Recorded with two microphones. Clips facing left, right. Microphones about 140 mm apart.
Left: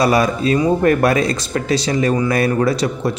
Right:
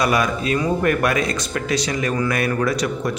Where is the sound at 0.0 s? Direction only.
35° left (ahead or behind).